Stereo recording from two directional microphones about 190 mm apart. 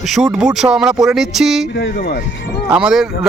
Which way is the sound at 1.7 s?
60° left (ahead or behind).